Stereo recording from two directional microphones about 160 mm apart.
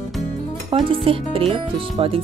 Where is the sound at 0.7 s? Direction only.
35° right (ahead or behind).